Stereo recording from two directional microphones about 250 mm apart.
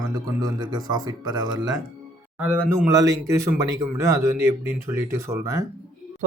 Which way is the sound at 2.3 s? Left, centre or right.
Centre.